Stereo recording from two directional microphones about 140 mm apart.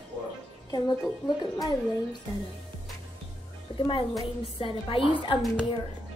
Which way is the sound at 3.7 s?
35° left (ahead or behind).